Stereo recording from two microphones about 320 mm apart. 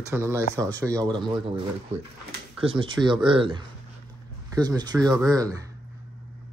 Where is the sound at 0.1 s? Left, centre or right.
Centre.